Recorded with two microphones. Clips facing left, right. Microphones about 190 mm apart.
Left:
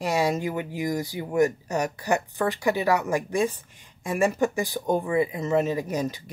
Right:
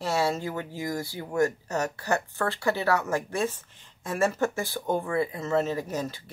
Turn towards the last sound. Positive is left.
turn(degrees=15)  # may be behind; listen again after turning